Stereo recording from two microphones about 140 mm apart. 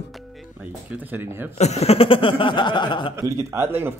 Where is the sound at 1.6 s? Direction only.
50° left (ahead or behind); by 3.1 s 35° left (ahead or behind).